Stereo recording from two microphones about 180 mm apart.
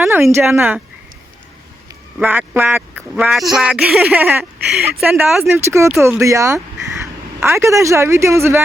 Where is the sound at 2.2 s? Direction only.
10° right (ahead or behind).